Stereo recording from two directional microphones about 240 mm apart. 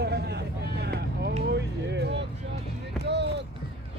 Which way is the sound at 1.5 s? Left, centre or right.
Right.